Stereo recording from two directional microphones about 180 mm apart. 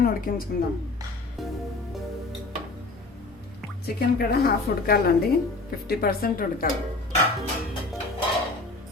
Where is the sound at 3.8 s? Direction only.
60° left (ahead or behind).